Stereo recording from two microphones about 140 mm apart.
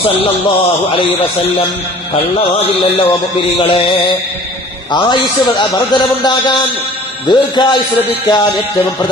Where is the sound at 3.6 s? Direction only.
40° left (ahead or behind).